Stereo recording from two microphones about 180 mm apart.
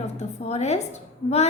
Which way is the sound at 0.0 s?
35° left (ahead or behind).